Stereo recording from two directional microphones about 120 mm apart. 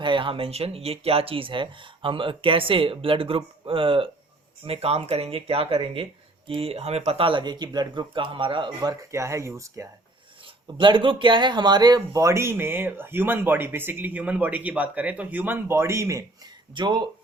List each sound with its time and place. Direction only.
0.0 s speech: 45° right (ahead or behind); by 9.8 s 25° right (ahead or behind)
10.8 s speech: 45° right (ahead or behind); by 16.2 s 25° right (ahead or behind)
16.7 s speech: 40° right (ahead or behind)